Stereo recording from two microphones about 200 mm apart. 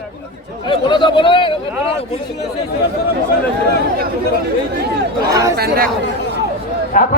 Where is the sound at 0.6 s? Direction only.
25° left (ahead or behind).